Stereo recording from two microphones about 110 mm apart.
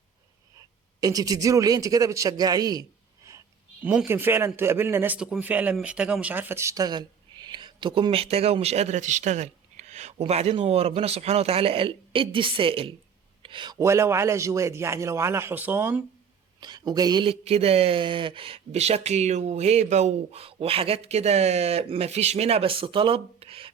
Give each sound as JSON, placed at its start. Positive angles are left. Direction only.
{"t": 1.0, "sound": "a man's voice", "side_deg": -35}
{"t": 4.0, "sound": "a man's voice", "side_deg": -20}
{"t": 13.4, "sound": "a sound", "side_deg": -45}
{"t": 13.7, "sound": "a man's voice", "side_deg": -25}
{"t": 16.6, "sound": "a woman's voice", "side_deg": -40}
{"t": 17.2, "sound": "speech", "side_deg": -65}